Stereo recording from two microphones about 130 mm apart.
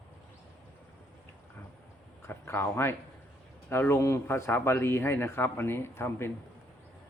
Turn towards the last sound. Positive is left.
turn(degrees=20)  # may be behind; listen again after turning